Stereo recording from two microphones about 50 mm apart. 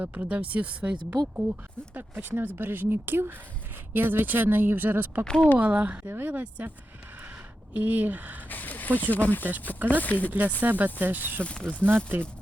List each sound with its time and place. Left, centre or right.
0.0 s speech: right
1.1 s speech: right
5.2 s speech: centre
5.5 s speech: right
6.1 s speech: right
7.7 s speech: right
8.4 s a sound: left
9.1 s speech: left
9.4 s speech: right
9.9 s speech: left
10.6 s speech: right
11.7 s speech: centre